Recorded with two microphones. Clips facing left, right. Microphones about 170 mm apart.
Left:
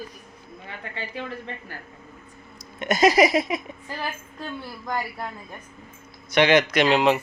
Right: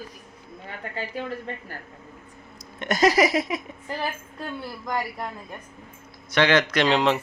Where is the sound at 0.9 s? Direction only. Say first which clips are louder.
Right 2 dB; 40° right (ahead or behind).